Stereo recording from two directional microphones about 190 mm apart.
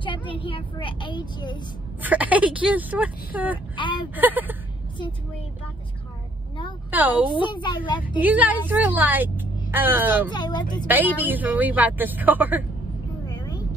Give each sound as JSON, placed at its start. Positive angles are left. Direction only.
{"t": 0.0, "sound": "a woman's voice", "side_deg": 25}
{"t": 2.0, "sound": "a woman's voice", "side_deg": -10}
{"t": 3.7, "sound": "speech", "side_deg": 25}
{"t": 4.1, "sound": "a woman's voice", "side_deg": -10}
{"t": 6.9, "sound": "a woman's voice", "side_deg": -10}
{"t": 7.3, "sound": "speech", "side_deg": 25}
{"t": 8.2, "sound": "a woman's voice", "side_deg": -10}
{"t": 10.3, "sound": "speech", "side_deg": 25}
{"t": 10.9, "sound": "a woman's voice", "side_deg": -10}